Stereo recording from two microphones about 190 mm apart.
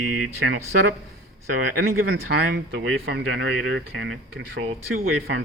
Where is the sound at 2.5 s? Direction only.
55° right (ahead or behind).